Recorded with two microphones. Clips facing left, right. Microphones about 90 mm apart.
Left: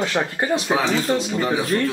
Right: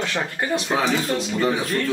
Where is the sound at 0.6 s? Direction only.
5° left (ahead or behind).